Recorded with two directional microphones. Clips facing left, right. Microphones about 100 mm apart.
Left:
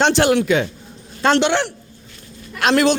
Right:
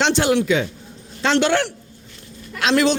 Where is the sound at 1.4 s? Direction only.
25° left (ahead or behind).